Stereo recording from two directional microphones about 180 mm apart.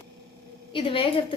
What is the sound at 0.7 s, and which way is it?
Speech, 30° left (ahead or behind).